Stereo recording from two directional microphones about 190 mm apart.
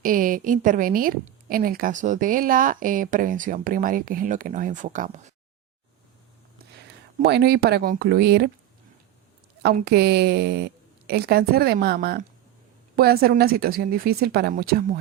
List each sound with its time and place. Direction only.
0.0 s a woman's voice: 45° right (ahead or behind)
6.8 s speech: 60° right (ahead or behind)
9.6 s a woman's voice: 55° right (ahead or behind)